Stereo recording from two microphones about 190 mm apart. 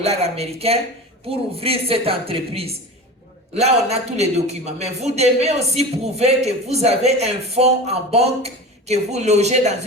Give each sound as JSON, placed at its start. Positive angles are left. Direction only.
{"t": 0.0, "sound": "a man's voice", "side_deg": -35}